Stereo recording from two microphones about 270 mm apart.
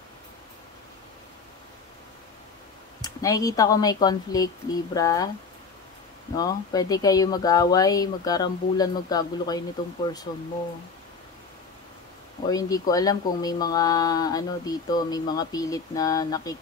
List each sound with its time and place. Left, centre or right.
3.0 s speech: centre
6.3 s speech: centre
12.4 s speech: centre